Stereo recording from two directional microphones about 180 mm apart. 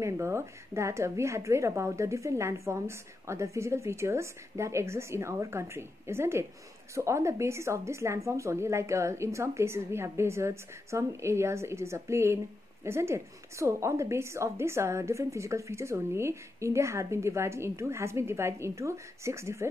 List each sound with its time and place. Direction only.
0.0 s a woman's voice: 15° right (ahead or behind)